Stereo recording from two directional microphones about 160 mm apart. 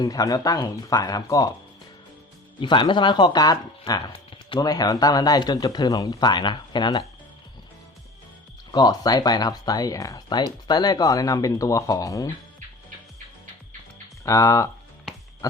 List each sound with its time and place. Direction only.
0.0 s speech: 25° left (ahead or behind)
2.6 s speech: 30° left (ahead or behind)
8.7 s speech: 25° left (ahead or behind)
14.3 s speech: 20° left (ahead or behind)